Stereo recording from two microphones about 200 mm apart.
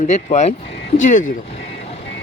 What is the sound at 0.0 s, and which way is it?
Speech, 35° left (ahead or behind).